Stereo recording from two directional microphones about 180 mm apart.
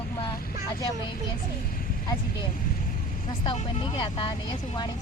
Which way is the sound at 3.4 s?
25° left (ahead or behind).